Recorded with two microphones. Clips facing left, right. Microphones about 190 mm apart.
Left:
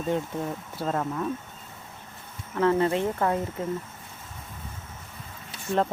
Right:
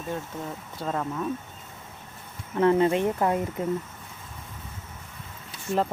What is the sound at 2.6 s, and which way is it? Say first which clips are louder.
Speech: right 2 dB; 20° right (ahead or behind).